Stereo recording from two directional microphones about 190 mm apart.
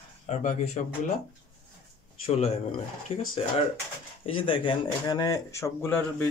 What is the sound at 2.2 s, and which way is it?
Speech, 30° left (ahead or behind).